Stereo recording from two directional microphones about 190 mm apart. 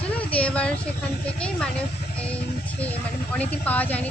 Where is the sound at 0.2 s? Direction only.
5° left (ahead or behind).